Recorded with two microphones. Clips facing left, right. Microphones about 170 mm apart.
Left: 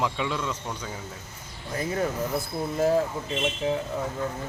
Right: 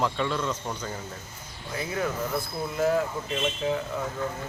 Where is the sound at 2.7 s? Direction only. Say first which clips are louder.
Left 2 dB; 35° left (ahead or behind).